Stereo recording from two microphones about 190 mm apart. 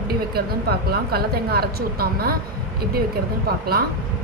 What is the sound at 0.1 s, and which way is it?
A woman's voice, 55° right (ahead or behind).